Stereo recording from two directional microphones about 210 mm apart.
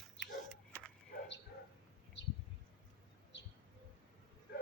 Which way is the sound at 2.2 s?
60° left (ahead or behind).